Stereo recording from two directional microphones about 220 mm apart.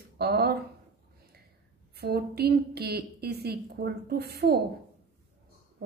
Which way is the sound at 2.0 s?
45° right (ahead or behind).